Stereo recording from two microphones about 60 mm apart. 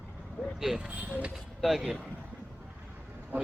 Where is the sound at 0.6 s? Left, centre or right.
Centre.